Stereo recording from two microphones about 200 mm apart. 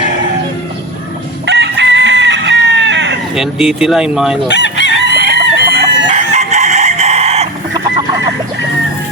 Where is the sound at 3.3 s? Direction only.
Centre (ahead or behind).